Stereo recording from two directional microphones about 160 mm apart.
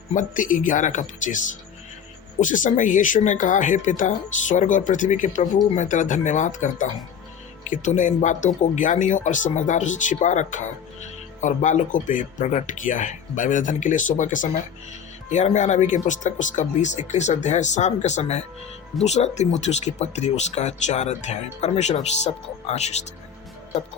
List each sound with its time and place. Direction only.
0.1 s speech: 55° left (ahead or behind)
2.4 s speech: 55° left (ahead or behind)